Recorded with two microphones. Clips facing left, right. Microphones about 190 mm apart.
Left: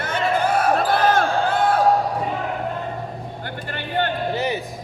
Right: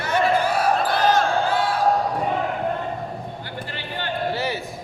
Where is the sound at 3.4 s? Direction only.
55° left (ahead or behind).